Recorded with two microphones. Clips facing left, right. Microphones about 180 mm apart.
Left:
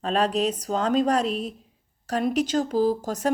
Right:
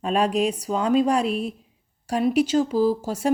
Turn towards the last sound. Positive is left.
turn(degrees=-10)  # may be behind; listen again after turning